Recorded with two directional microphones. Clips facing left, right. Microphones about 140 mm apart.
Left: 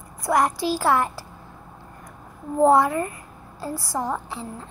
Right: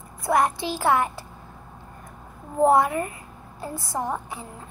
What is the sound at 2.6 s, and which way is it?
A child's voice, 20° right (ahead or behind).